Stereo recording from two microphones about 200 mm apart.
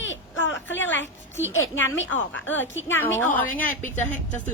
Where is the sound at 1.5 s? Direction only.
75° left (ahead or behind).